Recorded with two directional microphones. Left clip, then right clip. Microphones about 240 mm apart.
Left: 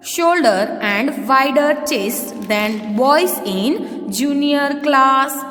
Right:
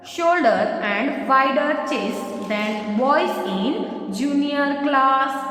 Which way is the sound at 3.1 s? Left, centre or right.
Left.